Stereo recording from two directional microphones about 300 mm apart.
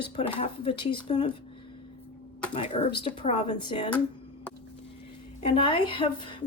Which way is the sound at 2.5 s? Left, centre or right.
Left.